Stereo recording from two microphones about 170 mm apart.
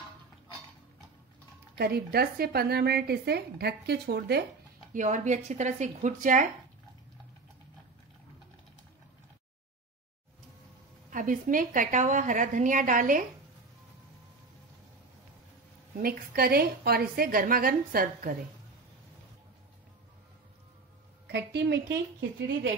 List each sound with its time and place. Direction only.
1.8 s a woman's voice: 65° right (ahead or behind)
4.9 s a woman's voice: 45° right (ahead or behind)
11.1 s a woman's voice: 50° right (ahead or behind)
16.0 s a woman's voice: 60° right (ahead or behind)
21.3 s a woman's voice: 90° right